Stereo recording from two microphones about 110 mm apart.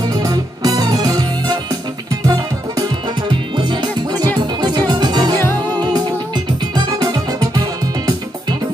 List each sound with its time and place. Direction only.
0.0 s music: 35° right (ahead or behind)